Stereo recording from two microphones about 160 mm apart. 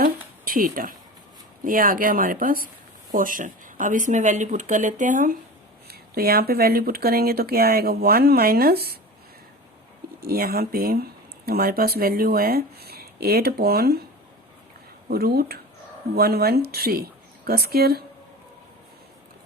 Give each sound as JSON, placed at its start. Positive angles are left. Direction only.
{"t": 0.0, "sound": "a sound", "side_deg": -60}
{"t": 1.6, "sound": "speech", "side_deg": -60}
{"t": 5.9, "sound": "speech", "side_deg": -70}
{"t": 10.2, "sound": "speech", "side_deg": -70}
{"t": 15.1, "sound": "speech", "side_deg": -75}